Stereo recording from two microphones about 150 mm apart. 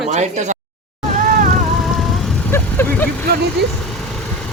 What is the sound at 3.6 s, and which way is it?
Speech, 90° right.